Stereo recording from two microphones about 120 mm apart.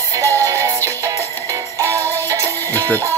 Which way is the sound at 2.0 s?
20° left (ahead or behind).